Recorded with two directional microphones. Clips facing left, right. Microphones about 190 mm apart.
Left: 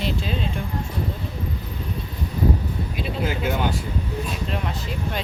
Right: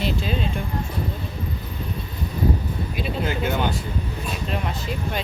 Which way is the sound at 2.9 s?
5° left (ahead or behind).